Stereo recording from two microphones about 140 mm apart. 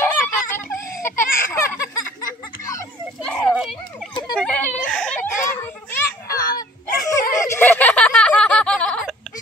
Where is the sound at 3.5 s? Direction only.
Centre (ahead or behind).